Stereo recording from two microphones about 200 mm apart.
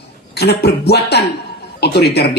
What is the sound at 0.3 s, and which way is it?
A man's voice, 55° left (ahead or behind).